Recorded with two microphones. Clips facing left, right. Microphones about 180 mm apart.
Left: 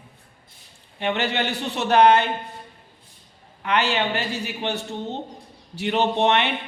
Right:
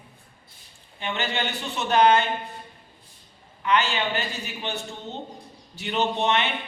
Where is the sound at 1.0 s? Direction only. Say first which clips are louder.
Left 5 dB; 65° left (ahead or behind).